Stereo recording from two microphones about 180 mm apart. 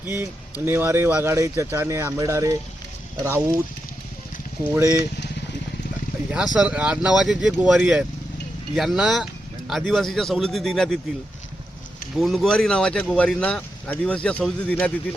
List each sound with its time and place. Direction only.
0.0 s speech: 10° right (ahead or behind)
4.8 s speech: 15° right (ahead or behind)
6.3 s a man's voice: 5° right (ahead or behind)
12.2 s speech: centre (ahead or behind)